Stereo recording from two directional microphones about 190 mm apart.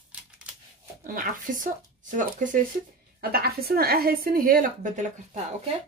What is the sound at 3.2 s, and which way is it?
A woman's voice, 55° right (ahead or behind).